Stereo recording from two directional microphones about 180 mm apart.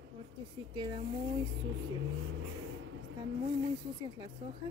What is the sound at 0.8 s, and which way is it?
Speech, 25° right (ahead or behind).